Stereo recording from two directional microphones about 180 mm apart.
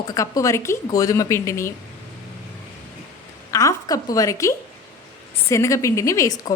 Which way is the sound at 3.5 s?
15° left (ahead or behind).